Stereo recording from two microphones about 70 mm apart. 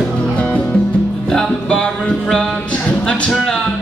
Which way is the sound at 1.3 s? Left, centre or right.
Centre.